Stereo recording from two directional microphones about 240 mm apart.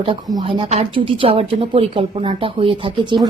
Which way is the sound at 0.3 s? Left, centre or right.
Right.